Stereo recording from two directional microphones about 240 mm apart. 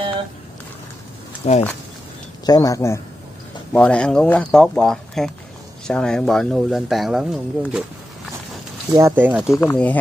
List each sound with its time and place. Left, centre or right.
1.4 s speech: left
2.4 s speech: centre
8.9 s speech: centre
9.5 s speech: centre